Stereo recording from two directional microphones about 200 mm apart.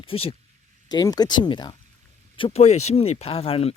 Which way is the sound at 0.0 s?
25° left (ahead or behind).